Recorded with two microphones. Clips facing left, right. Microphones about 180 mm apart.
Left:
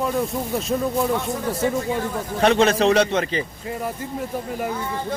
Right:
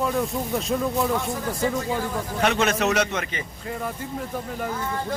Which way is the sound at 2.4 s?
35° left (ahead or behind).